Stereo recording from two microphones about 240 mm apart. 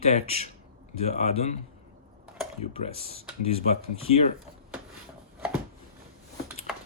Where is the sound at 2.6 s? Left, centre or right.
Left.